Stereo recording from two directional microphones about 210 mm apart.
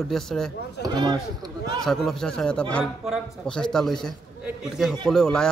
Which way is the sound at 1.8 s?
Centre (ahead or behind).